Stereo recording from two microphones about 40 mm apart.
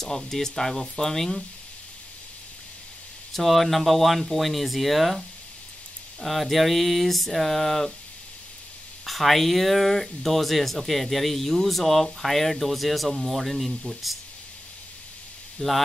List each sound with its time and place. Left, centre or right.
0.3 s speech: centre
3.3 s speech: centre
6.2 s speech: centre
9.0 s speech: centre
15.6 s speech: centre